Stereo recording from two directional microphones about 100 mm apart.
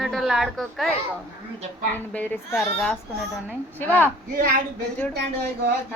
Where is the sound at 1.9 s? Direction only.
15° left (ahead or behind).